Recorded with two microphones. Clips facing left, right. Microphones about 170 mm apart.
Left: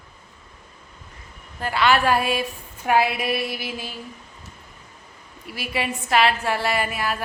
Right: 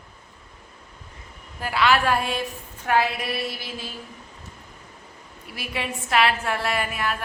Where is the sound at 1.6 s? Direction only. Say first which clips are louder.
Left 1 dB; 5° right (ahead or behind).